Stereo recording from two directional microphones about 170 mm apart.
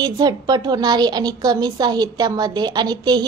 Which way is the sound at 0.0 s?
25° right (ahead or behind).